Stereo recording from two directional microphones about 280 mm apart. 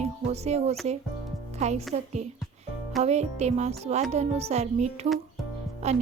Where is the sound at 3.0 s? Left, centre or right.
Right.